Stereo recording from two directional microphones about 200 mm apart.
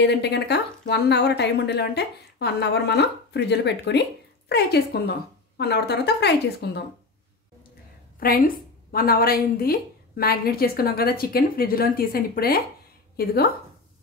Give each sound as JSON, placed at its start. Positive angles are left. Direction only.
{"t": 0.0, "sound": "a woman's voice", "side_deg": 55}
{"t": 8.2, "sound": "a woman's voice", "side_deg": 45}